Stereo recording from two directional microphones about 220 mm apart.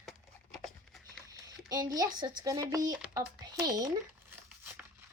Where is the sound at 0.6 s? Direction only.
Centre (ahead or behind).